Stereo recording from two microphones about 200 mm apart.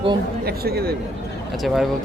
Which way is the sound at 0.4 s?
50° right (ahead or behind).